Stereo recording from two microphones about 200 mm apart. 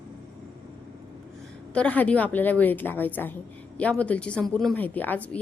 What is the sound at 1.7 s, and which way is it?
A woman's voice, 5° left (ahead or behind).